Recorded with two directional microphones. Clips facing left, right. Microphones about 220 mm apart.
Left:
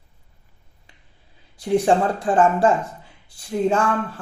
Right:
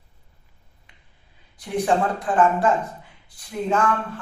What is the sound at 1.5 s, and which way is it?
A man's voice, 30° left (ahead or behind).